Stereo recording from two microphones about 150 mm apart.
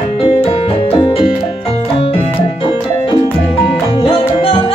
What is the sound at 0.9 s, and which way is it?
Music, 35° left (ahead or behind).